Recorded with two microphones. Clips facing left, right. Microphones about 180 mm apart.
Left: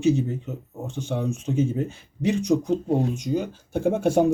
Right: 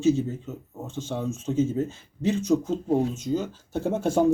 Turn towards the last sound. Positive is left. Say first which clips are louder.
# left 3 dB
turn(degrees=15)  # may be behind; listen again after turning